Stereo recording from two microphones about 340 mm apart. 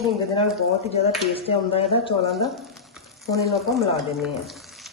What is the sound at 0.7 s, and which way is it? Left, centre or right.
Speech, centre.